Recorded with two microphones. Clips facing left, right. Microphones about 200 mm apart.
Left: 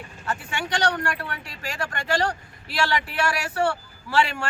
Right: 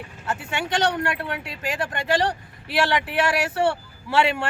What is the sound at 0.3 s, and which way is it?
A man's voice, 25° right (ahead or behind).